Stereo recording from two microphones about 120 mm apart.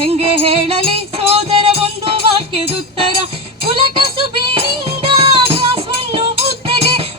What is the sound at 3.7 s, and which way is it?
Music, 45° right (ahead or behind).